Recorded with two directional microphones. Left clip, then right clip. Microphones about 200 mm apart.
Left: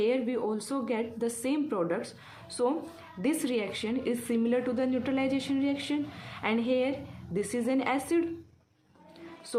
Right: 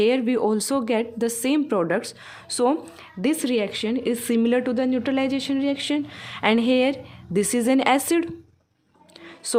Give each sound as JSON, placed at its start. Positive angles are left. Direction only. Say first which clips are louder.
{"t": 0.0, "sound": "a woman's voice", "louder": "right 8 dB", "side_deg": -50}